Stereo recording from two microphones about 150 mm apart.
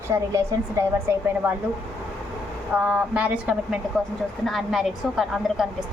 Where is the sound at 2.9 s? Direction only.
10° right (ahead or behind).